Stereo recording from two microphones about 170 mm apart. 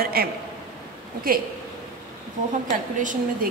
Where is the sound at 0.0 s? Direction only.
60° right (ahead or behind).